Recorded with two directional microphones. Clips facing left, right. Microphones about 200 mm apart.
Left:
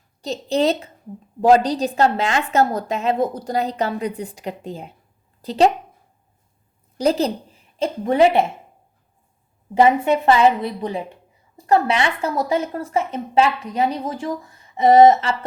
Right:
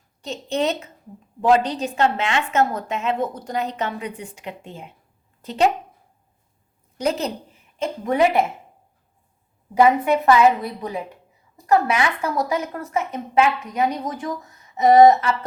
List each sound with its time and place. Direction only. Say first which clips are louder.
0.2 s a woman's voice: left 4 dB; 35° left (ahead or behind)
7.0 s a woman's voice: left 5 dB; 35° left (ahead or behind)
9.7 s a woman's voice: left 1 dB; 25° left (ahead or behind)